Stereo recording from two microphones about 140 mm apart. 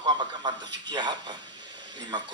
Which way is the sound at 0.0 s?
30° right (ahead or behind).